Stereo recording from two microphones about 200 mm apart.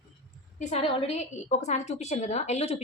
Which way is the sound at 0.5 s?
30° left (ahead or behind).